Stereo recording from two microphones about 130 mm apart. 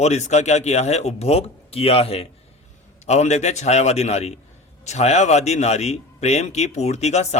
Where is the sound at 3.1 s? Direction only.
60° left (ahead or behind).